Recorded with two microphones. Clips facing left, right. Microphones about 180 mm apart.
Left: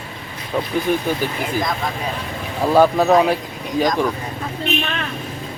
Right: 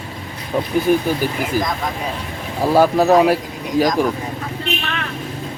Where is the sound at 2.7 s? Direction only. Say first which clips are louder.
Right 1 dB; 5° right (ahead or behind).